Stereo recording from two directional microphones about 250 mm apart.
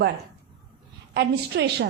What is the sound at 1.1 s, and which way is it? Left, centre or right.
Speech, right.